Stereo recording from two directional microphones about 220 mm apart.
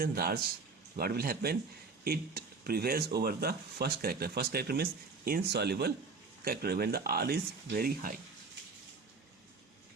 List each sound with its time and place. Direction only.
0.0 s speech: 45° right (ahead or behind)